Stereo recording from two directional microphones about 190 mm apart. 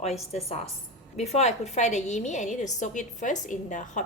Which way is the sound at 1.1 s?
35° left (ahead or behind).